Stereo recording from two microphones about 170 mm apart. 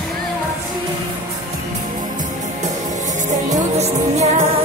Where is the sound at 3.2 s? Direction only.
45° right (ahead or behind).